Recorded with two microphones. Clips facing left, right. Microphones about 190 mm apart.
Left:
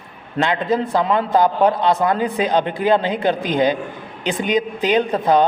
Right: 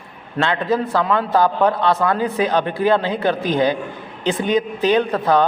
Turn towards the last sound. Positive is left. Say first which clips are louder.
# left 1 dB
turn(degrees=15)  # may be behind; listen again after turning